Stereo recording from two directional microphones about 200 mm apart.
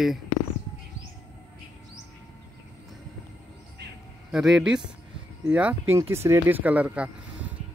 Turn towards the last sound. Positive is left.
turn(degrees=-5)  # may be behind; listen again after turning